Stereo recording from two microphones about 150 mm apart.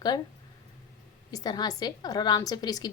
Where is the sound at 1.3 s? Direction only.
25° left (ahead or behind).